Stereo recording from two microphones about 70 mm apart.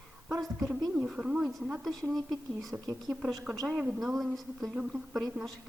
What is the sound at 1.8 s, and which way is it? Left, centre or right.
Speech, centre.